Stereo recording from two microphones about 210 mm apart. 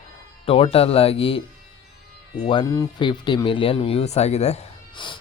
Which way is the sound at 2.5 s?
20° left (ahead or behind).